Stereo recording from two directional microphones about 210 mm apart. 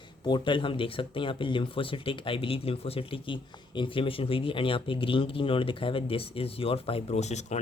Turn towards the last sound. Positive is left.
turn(degrees=35)  # may be behind; listen again after turning